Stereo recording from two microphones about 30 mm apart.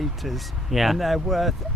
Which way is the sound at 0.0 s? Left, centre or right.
Centre.